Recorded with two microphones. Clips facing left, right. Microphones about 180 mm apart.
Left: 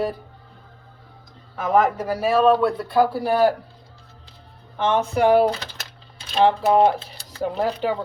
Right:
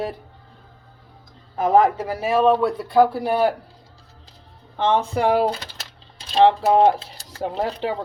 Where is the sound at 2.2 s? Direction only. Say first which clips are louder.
Left 1 dB; 15° right (ahead or behind).